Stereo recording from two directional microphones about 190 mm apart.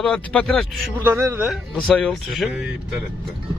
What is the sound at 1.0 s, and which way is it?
Speech, 15° right (ahead or behind).